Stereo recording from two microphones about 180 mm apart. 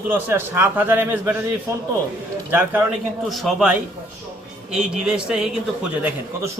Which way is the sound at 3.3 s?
Centre (ahead or behind).